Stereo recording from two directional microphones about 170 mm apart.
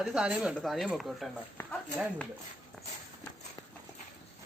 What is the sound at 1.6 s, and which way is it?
Speech, 15° left (ahead or behind).